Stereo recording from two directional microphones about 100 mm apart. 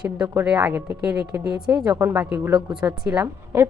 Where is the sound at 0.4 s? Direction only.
15° right (ahead or behind).